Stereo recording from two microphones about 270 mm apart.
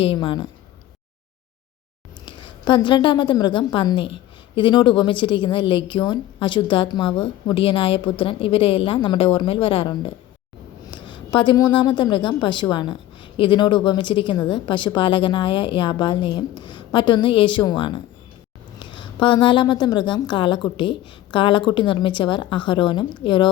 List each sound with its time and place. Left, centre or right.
0.0 s a woman's voice: centre
2.2 s a woman's voice: centre